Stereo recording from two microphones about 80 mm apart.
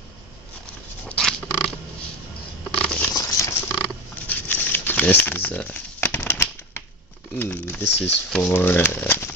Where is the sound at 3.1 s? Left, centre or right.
Left.